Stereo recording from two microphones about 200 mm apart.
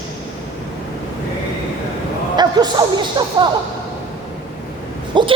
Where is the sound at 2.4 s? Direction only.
20° right (ahead or behind).